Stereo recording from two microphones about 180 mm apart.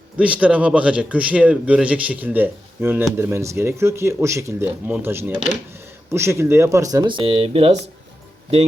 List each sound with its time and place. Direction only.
0.2 s speech: 5° right (ahead or behind); by 7.7 s 30° right (ahead or behind)